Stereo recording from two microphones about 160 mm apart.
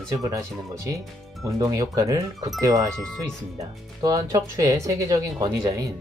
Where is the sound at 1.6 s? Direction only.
20° right (ahead or behind).